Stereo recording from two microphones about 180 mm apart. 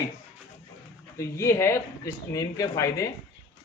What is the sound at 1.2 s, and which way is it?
Speech, 15° left (ahead or behind).